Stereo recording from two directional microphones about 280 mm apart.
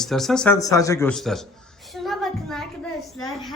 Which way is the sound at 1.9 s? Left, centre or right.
Centre.